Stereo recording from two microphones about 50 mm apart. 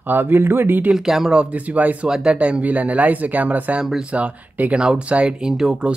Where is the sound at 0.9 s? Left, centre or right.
Centre.